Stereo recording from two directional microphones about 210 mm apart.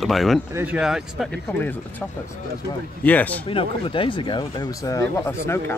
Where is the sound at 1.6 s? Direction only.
10° left (ahead or behind).